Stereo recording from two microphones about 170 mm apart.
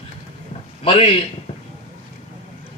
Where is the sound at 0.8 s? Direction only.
35° left (ahead or behind).